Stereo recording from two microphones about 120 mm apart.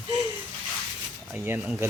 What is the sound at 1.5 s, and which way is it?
Speech, 15° right (ahead or behind).